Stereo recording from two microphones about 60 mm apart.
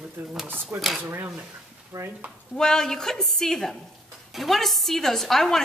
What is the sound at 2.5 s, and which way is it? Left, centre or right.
A woman's voice, centre.